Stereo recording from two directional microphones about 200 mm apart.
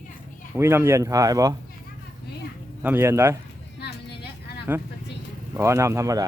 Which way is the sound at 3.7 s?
55° left (ahead or behind).